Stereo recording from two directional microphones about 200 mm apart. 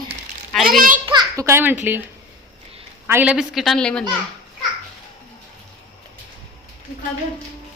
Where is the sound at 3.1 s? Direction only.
5° right (ahead or behind).